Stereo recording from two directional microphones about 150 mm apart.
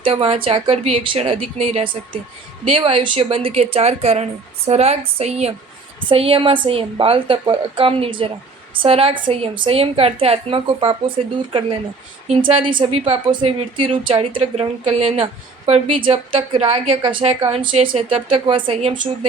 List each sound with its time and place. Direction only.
0.0 s a woman's voice: 40° right (ahead or behind)
12.4 s a woman's voice: 35° right (ahead or behind)